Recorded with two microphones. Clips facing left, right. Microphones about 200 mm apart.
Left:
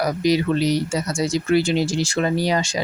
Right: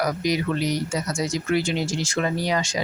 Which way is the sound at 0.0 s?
30° left (ahead or behind).